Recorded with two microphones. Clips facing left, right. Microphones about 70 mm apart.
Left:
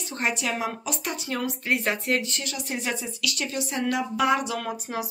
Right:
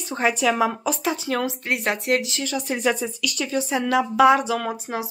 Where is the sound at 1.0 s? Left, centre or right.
Right.